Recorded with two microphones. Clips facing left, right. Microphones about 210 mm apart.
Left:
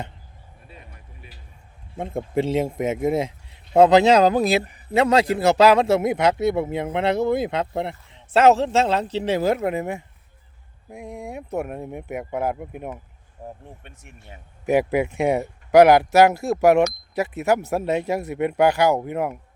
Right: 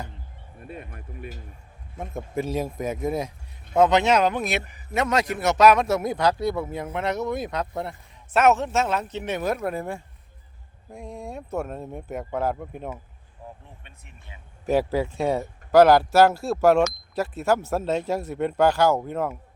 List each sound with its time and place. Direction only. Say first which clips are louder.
0.7 s music: right 9 dB; 55° right (ahead or behind)
2.0 s speech: left 6 dB; 30° left (ahead or behind); by 13.0 s 10° left (ahead or behind)
13.7 s speech: left 6 dB; 50° left (ahead or behind)
14.7 s speech: left 3 dB; 15° left (ahead or behind)